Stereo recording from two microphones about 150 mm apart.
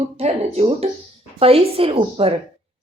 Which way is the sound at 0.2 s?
45° right (ahead or behind).